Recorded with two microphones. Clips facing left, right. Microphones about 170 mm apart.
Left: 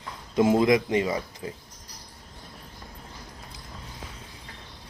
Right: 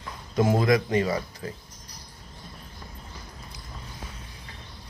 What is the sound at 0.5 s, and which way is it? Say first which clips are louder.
Speech: even; 20° left (ahead or behind).